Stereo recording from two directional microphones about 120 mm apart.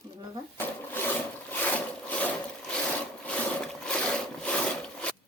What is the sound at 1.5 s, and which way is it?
Wood, 15° left (ahead or behind).